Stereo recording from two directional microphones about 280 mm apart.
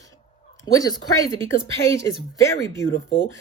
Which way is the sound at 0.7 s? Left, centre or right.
Centre.